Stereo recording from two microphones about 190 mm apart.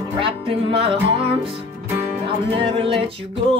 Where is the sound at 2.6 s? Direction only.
30° right (ahead or behind).